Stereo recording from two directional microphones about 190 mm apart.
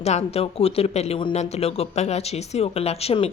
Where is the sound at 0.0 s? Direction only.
35° left (ahead or behind).